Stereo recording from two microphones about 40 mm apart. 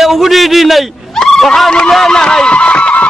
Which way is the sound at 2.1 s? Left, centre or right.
Centre.